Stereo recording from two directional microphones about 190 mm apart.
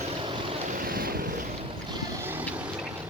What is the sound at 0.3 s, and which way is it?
Vehicle, 25° right (ahead or behind).